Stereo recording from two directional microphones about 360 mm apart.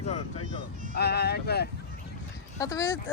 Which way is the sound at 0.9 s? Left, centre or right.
Left.